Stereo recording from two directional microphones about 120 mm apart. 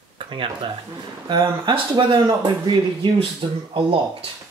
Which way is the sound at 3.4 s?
45° right (ahead or behind).